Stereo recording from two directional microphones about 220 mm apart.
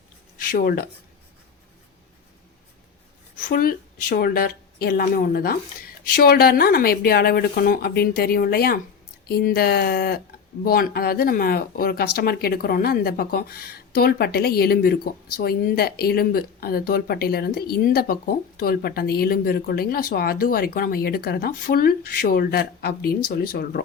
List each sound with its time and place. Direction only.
0.5 s speech: 40° left (ahead or behind)
3.3 s speech: 40° left (ahead or behind)